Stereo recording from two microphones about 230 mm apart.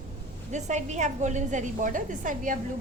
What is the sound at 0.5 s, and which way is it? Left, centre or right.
A woman's voice, right.